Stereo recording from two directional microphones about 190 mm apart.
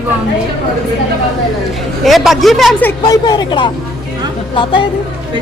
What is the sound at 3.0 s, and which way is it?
Speech, 20° left (ahead or behind).